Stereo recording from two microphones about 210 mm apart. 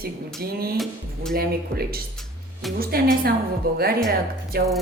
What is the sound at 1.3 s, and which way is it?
Speech, 45° right (ahead or behind).